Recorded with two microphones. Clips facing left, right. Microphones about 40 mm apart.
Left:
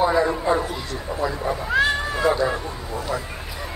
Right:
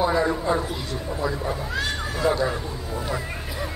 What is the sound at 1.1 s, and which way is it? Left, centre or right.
Speech, centre.